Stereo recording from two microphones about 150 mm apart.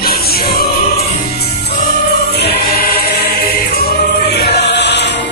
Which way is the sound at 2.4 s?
90° left.